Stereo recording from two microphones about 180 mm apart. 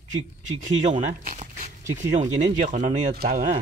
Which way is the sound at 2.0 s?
40° right (ahead or behind).